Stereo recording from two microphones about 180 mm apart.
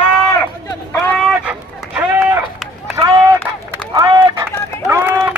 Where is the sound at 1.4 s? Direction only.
10° right (ahead or behind).